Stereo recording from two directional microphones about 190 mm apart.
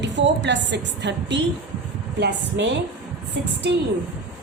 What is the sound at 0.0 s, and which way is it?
A woman's voice, 65° right (ahead or behind).